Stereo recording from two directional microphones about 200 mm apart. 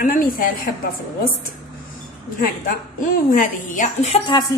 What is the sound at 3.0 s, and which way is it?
Speech, 40° left (ahead or behind).